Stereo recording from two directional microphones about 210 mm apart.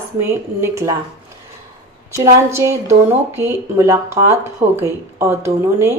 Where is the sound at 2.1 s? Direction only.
15° right (ahead or behind).